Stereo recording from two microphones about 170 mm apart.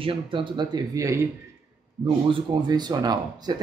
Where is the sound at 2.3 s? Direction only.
30° right (ahead or behind).